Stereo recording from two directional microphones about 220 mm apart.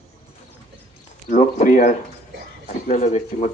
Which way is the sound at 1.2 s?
35° left (ahead or behind).